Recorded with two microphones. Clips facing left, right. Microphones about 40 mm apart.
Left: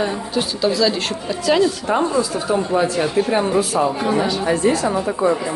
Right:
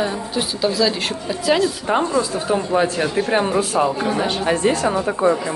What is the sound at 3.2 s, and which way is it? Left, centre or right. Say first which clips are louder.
Speech: left 1 dB; right.